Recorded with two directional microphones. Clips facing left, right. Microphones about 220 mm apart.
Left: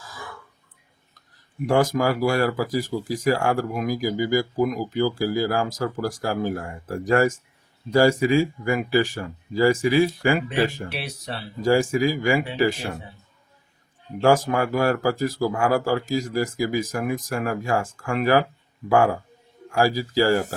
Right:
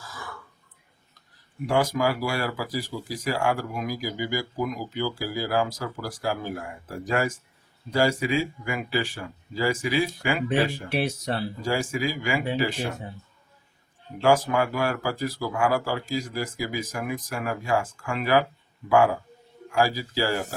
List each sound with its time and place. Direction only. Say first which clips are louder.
1.6 s speech: left 4 dB; 45° left (ahead or behind)
10.9 s speech: right 6 dB; 45° right (ahead or behind)
11.6 s speech: left 10 dB; 45° left (ahead or behind)
14.2 s speech: left 2 dB; 45° left (ahead or behind)